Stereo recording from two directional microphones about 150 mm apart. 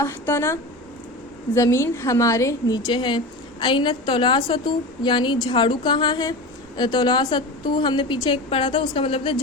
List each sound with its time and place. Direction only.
0.0 s a woman's voice: 20° left (ahead or behind); by 9.4 s 35° left (ahead or behind)